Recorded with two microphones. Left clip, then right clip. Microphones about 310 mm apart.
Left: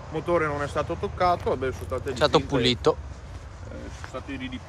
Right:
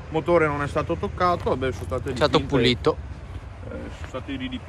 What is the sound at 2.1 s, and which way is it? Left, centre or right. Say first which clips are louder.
Speech: right 1 dB; centre.